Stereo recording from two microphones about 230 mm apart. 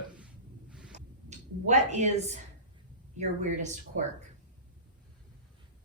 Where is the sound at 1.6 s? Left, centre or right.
Right.